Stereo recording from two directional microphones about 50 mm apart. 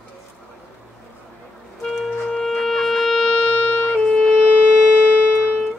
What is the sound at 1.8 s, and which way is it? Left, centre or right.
Music, centre.